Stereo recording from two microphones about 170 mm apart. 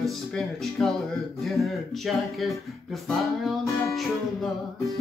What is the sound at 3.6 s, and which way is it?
Music, 15° left (ahead or behind).